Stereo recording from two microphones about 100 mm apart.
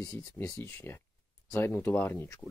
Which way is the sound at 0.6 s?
25° left (ahead or behind).